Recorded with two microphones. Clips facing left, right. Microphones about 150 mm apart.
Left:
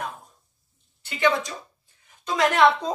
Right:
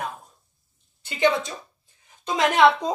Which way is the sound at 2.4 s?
15° right (ahead or behind).